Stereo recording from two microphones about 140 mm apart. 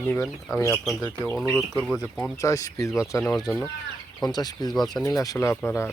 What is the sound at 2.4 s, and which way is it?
Speech, 25° left (ahead or behind).